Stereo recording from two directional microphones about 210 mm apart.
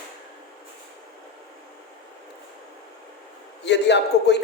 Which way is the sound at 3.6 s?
55° left (ahead or behind).